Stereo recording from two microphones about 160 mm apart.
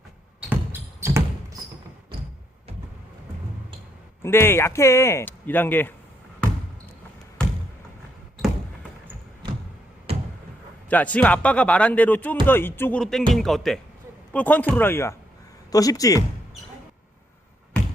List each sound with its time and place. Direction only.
0.3 s music: 10° right (ahead or behind)
4.2 s speech: 15° left (ahead or behind)
10.1 s a sound: 40° right (ahead or behind)
10.8 s speech: 10° left (ahead or behind)